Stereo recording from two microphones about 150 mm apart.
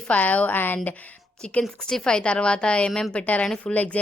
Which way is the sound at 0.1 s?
10° left (ahead or behind).